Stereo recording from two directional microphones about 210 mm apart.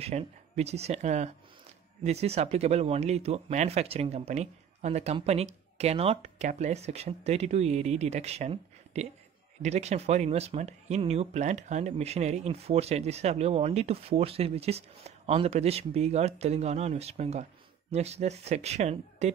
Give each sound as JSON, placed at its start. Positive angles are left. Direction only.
{"t": 0.0, "sound": "speech", "side_deg": -30}